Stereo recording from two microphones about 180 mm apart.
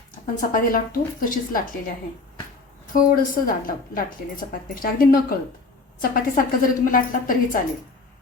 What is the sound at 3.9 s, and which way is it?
A woman's voice, 50° left (ahead or behind).